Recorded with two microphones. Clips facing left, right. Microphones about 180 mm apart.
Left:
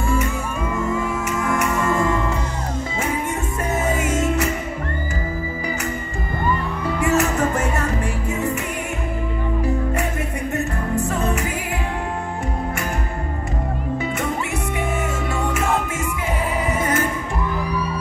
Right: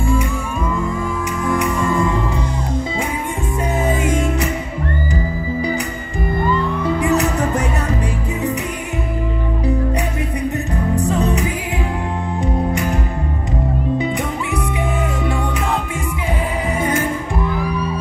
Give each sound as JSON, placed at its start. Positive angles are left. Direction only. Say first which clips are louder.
{"t": 1.5, "sound": "music", "louder": "right 3 dB", "side_deg": 55}
{"t": 4.1, "sound": "music", "louder": "right 1 dB", "side_deg": -15}
{"t": 7.0, "sound": "music", "louder": "left 1 dB", "side_deg": -15}